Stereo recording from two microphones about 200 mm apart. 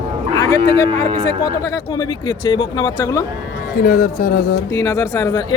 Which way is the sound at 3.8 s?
45° left (ahead or behind).